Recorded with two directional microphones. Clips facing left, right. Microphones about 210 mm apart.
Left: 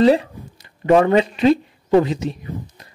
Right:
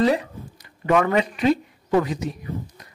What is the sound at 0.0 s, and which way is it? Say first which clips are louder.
Speech: left 6 dB; 30° left (ahead or behind).